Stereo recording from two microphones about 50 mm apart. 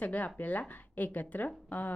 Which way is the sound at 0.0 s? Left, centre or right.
Left.